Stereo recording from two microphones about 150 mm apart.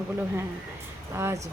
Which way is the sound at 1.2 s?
15° right (ahead or behind).